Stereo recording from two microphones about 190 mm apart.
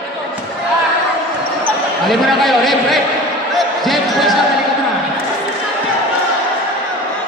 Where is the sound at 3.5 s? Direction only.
Centre (ahead or behind).